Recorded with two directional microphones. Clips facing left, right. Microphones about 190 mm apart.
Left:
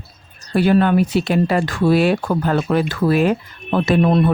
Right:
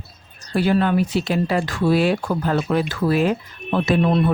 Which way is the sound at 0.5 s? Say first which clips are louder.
Left 4 dB; 60° left (ahead or behind).